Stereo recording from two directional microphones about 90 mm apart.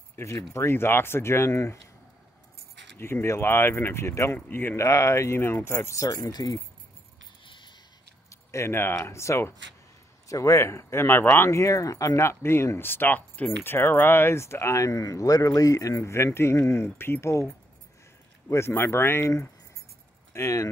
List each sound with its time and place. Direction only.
0.1 s speech: 30° left (ahead or behind)
3.0 s speech: 25° left (ahead or behind)
4.8 s speech: 35° left (ahead or behind)
7.4 s a sound: 65° left (ahead or behind)
8.3 s speech: 30° left (ahead or behind)
18.5 s speech: 25° left (ahead or behind)